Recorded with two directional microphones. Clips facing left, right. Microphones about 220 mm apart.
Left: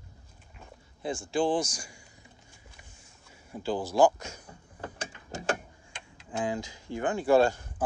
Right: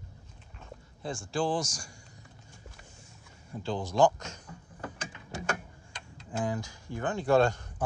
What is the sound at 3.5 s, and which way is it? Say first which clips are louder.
Speech: left 3 dB; 5° left (ahead or behind).